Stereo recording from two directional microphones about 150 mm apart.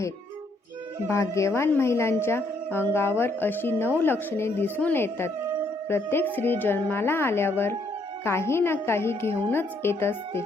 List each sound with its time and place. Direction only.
1.0 s a woman's voice: 20° left (ahead or behind)